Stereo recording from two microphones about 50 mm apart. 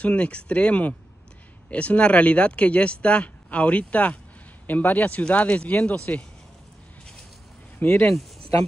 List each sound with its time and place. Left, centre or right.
0.0 s a man's voice: left
7.8 s a man's voice: left